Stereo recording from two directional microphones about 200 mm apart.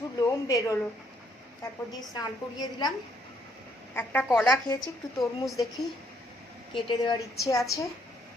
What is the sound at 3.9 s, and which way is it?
Speech, 10° left (ahead or behind).